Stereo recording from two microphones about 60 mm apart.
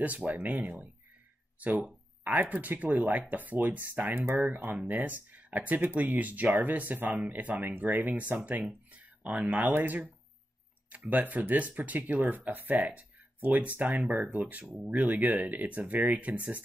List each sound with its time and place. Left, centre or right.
0.0 s speech: right
8.9 s a sound: right
9.8 s speech: right
11.1 s speech: right